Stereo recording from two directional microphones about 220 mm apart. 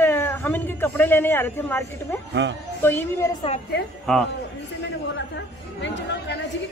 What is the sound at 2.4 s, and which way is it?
Speech, 55° right (ahead or behind).